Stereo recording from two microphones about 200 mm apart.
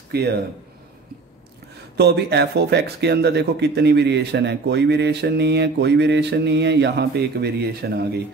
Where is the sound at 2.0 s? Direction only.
55° right (ahead or behind).